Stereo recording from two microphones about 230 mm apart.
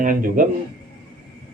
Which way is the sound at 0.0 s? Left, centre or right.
Right.